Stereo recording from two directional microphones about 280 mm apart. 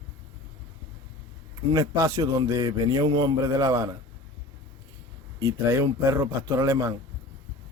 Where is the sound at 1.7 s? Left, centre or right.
Centre.